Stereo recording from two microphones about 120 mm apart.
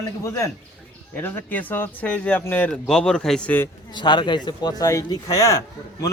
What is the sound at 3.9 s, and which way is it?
Speech, 40° left (ahead or behind).